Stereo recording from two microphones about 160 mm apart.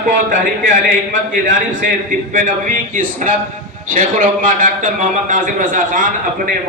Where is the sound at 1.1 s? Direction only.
55° right (ahead or behind).